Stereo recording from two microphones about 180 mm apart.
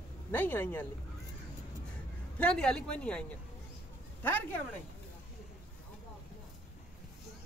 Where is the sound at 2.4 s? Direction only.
5° left (ahead or behind).